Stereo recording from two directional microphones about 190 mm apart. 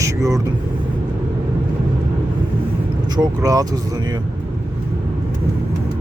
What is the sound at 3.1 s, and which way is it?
Speech, 20° right (ahead or behind).